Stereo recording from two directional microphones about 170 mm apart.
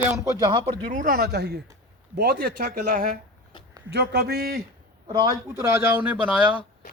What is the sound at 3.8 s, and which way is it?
Speech, 75° right (ahead or behind).